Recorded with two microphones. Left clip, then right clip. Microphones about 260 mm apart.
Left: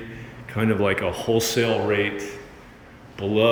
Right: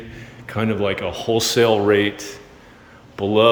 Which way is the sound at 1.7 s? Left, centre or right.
Right.